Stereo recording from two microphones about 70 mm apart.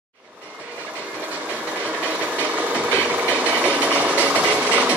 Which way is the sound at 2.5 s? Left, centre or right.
Right.